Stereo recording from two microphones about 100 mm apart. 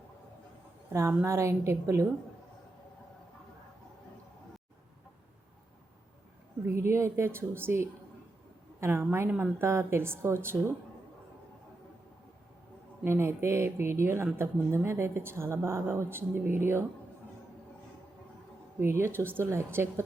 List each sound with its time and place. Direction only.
0.9 s speech: 30° right (ahead or behind)
6.7 s a woman's voice: 25° right (ahead or behind)
13.1 s speech: 25° right (ahead or behind)
18.8 s speech: 25° right (ahead or behind)